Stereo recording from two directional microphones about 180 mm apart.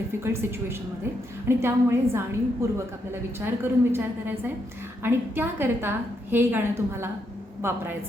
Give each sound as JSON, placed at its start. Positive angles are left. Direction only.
{"t": 0.2, "sound": "a woman's voice", "side_deg": -15}